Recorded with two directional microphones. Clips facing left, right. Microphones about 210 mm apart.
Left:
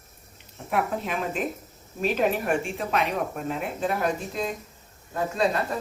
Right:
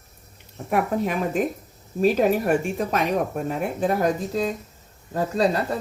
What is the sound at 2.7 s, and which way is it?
Speech, 40° right (ahead or behind).